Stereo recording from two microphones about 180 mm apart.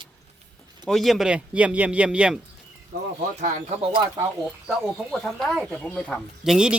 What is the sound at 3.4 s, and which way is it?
Speech, 35° right (ahead or behind).